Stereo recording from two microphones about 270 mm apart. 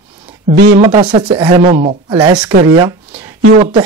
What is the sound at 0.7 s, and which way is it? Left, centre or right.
A man's voice, right.